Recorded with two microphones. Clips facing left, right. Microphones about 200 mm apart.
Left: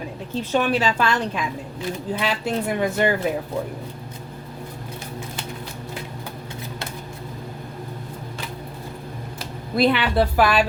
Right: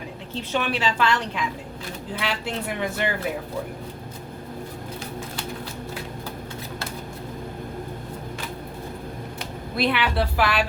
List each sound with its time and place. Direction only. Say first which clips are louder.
0.5 s speech: left 4 dB; 40° left (ahead or behind)
9.7 s speech: left 5 dB; 45° left (ahead or behind)